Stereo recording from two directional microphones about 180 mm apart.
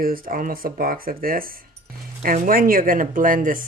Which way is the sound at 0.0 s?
55° right (ahead or behind).